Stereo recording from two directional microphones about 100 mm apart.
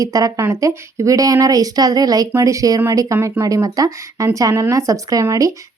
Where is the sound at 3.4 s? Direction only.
35° right (ahead or behind).